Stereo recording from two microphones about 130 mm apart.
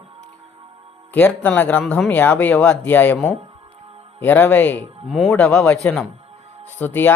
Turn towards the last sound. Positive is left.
turn(degrees=15)  # may be behind; listen again after turning